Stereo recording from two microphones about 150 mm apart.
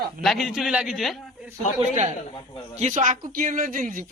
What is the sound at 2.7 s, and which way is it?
Speech, 55° right (ahead or behind).